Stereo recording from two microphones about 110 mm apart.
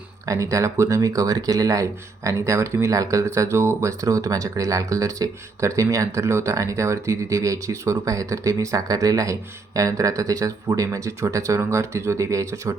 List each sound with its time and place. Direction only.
0.3 s speech: 30° right (ahead or behind)